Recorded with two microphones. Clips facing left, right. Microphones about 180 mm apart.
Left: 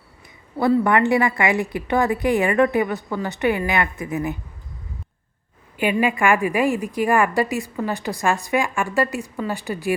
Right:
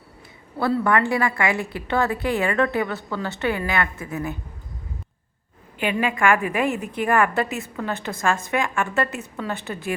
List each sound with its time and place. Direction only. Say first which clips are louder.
0.6 s a woman's voice: left 3 dB; 15° left (ahead or behind)
5.8 s a woman's voice: left 2 dB; 10° left (ahead or behind)